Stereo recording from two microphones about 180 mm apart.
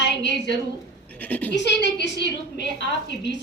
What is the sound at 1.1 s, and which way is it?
Speech, 10° left (ahead or behind).